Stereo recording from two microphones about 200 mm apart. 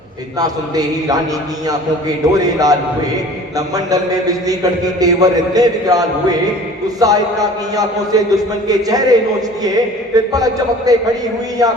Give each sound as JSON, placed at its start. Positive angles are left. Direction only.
{"t": 0.3, "sound": "a man's voice", "side_deg": -20}
{"t": 3.8, "sound": "a man's voice", "side_deg": -15}
{"t": 10.3, "sound": "a man's voice", "side_deg": -20}